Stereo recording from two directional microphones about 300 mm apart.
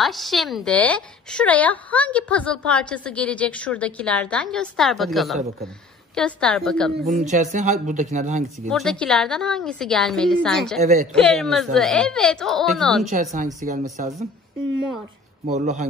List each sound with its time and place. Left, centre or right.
0.0 s speech: centre
7.0 s speech: right
8.6 s speech: centre
13.0 s speech: right
15.4 s speech: right